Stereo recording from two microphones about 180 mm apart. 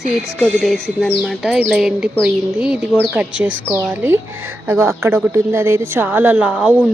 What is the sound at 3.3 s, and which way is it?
Speech, 90° right.